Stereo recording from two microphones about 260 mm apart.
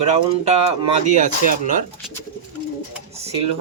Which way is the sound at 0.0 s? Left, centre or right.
Right.